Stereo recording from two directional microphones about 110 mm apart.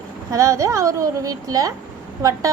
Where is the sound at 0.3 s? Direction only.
30° right (ahead or behind).